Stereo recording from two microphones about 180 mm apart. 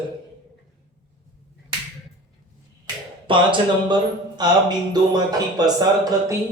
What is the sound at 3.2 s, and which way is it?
Music, 25° right (ahead or behind).